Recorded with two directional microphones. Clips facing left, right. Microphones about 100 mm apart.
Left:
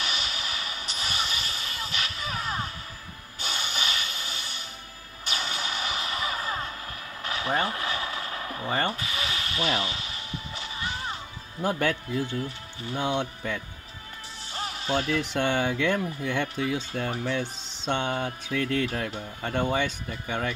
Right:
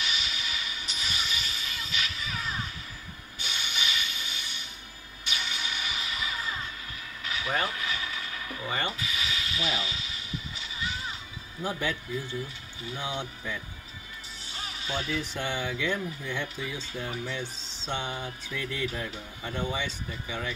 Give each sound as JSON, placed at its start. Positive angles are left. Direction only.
{"t": 0.0, "sound": "a sound", "side_deg": 45}
{"t": 5.3, "sound": "music", "side_deg": 40}
{"t": 7.2, "sound": "a sound", "side_deg": 40}
{"t": 9.6, "sound": "speech", "side_deg": 55}
{"t": 11.6, "sound": "speech", "side_deg": 65}
{"t": 14.9, "sound": "speech", "side_deg": 60}